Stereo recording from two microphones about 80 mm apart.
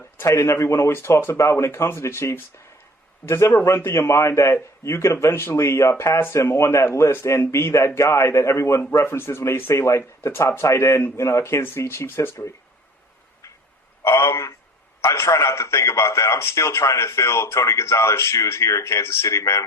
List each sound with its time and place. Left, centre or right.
0.2 s a man's voice: left
14.0 s a man's voice: left